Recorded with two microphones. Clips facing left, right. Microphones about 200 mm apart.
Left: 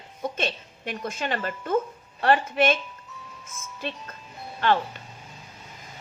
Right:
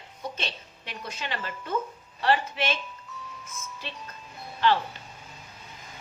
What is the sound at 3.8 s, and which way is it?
Speech, 55° left (ahead or behind).